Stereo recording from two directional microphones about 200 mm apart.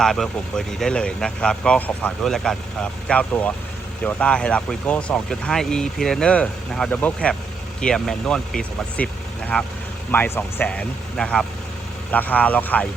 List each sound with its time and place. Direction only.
0.0 s speech: centre (ahead or behind)